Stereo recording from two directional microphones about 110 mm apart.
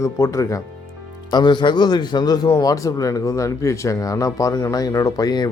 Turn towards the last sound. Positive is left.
turn(degrees=35)  # may be behind; listen again after turning